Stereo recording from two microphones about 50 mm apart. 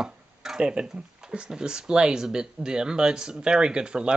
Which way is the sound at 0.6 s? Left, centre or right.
Right.